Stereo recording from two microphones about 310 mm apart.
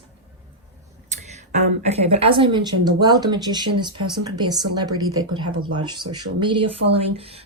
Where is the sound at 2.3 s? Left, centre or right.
Centre.